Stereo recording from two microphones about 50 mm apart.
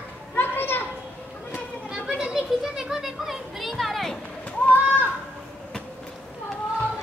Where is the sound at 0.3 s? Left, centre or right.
Left.